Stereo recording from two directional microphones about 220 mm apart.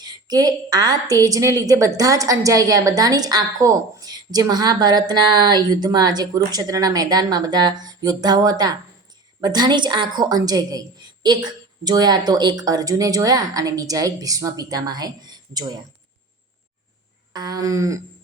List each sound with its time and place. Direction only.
0.0 s a woman's voice: 15° right (ahead or behind)
17.3 s a woman's voice: 20° right (ahead or behind)